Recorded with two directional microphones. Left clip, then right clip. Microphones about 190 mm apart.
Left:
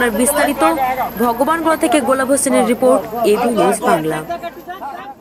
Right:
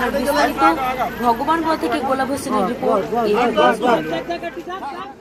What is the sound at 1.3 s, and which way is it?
A woman's voice, 15° left (ahead or behind).